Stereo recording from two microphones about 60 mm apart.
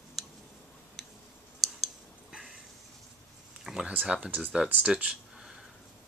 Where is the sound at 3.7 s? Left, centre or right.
Centre.